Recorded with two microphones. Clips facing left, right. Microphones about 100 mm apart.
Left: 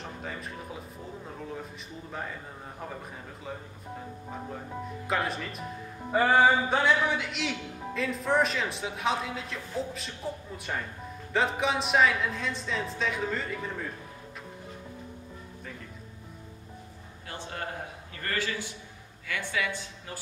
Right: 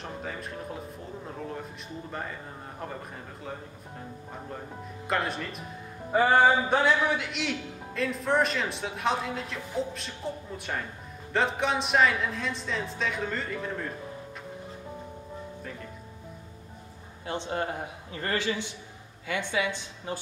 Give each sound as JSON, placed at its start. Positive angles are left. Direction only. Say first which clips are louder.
{"t": 0.0, "sound": "a man's voice", "louder": "right 2 dB", "side_deg": 0}
{"t": 5.0, "sound": "a man's voice", "louder": "right 1 dB", "side_deg": 0}
{"t": 17.3, "sound": "speech", "louder": "right 6 dB", "side_deg": -25}